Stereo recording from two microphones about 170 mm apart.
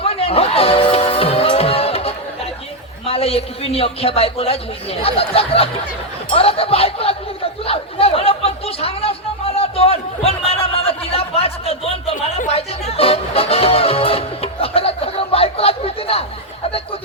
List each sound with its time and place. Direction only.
0.0 s music: 35° left (ahead or behind)
3.1 s a man's voice: 35° left (ahead or behind)
7.6 s chatter: 35° left (ahead or behind)
9.6 s a sound: 35° left (ahead or behind)
12.1 s a sound: 50° left (ahead or behind)
12.5 s music: 35° left (ahead or behind)